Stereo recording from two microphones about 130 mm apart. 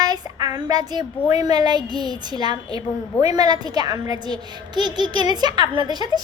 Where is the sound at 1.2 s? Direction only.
30° right (ahead or behind).